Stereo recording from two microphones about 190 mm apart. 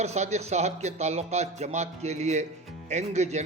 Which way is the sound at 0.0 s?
35° right (ahead or behind).